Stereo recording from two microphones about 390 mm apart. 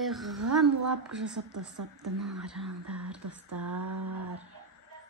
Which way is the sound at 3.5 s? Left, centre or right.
Right.